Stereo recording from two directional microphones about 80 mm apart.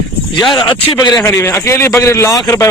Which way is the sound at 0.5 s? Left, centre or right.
Left.